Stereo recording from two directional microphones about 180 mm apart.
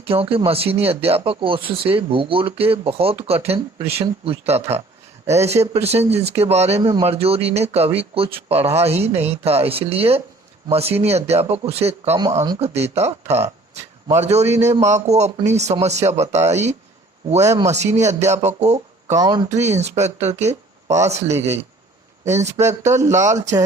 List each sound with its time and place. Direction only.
0.1 s speech: 30° right (ahead or behind)
17.4 s a man's voice: 20° right (ahead or behind)
18.0 s speech: 40° right (ahead or behind)
19.1 s speech: 20° right (ahead or behind)
19.5 s speech: 40° right (ahead or behind)
23.0 s speech: 40° right (ahead or behind)
23.2 s a man's voice: 15° right (ahead or behind)